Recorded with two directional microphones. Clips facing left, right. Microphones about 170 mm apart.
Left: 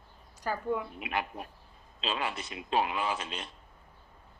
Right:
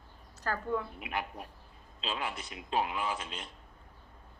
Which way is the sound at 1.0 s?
90° left.